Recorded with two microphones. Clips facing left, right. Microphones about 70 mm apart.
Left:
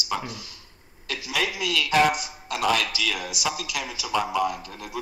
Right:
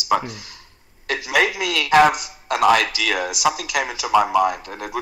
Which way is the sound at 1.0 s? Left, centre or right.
Right.